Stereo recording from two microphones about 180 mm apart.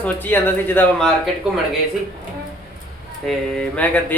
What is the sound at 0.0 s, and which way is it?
Speech, 10° left (ahead or behind).